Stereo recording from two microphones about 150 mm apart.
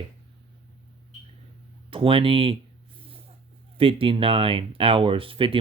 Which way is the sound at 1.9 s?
35° right (ahead or behind).